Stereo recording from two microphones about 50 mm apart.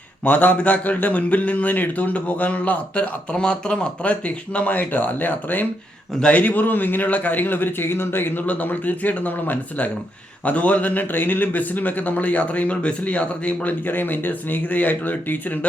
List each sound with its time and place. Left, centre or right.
0.3 s a man's voice: left
8.4 s a man's voice: left